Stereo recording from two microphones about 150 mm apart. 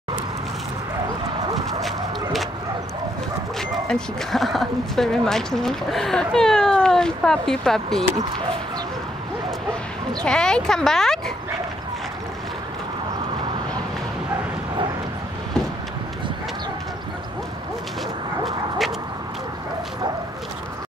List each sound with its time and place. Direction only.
1.8 s a sound: centre (ahead or behind)
3.5 s speech: 5° left (ahead or behind)
10.2 s speech: 5° left (ahead or behind)
18.4 s bow-wow: centre (ahead or behind)